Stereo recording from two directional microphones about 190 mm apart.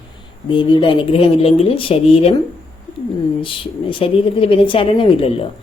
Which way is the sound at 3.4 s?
25° left (ahead or behind).